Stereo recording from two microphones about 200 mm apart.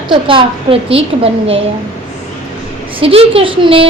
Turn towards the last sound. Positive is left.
turn(degrees=-25)  # may be behind; listen again after turning